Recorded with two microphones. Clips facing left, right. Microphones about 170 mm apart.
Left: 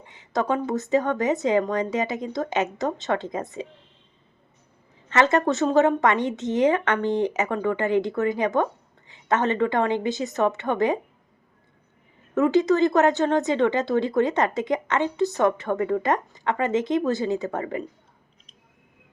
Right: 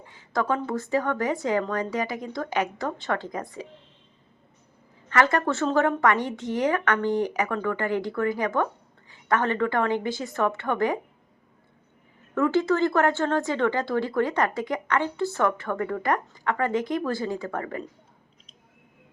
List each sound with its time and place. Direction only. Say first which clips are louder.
0.0 s speech: left 2 dB; 20° left (ahead or behind)
5.0 s speech: left 3 dB; 20° left (ahead or behind)
12.3 s speech: left 3 dB; 20° left (ahead or behind)